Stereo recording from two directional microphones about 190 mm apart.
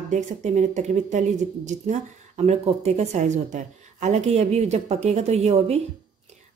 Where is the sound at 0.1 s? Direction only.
40° right (ahead or behind).